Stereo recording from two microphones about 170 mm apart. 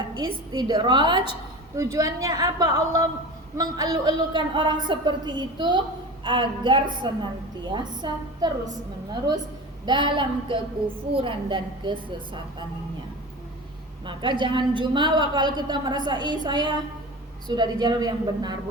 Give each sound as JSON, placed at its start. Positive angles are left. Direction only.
{"t": 0.2, "sound": "a woman's voice", "side_deg": -25}
{"t": 9.8, "sound": "a woman's voice", "side_deg": -25}
{"t": 14.0, "sound": "a woman's voice", "side_deg": -30}